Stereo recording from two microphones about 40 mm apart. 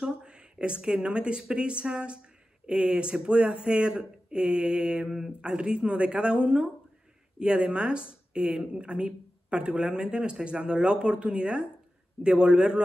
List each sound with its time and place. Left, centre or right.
0.0 s speech: right
5.0 s speech: centre